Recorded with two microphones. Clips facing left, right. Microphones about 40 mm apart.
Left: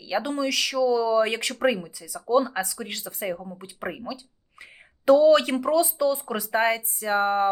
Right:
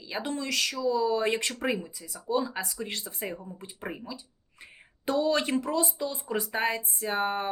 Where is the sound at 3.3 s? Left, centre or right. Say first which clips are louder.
Left 5 dB; left.